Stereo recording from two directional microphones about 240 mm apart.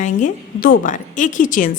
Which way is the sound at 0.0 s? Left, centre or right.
Left.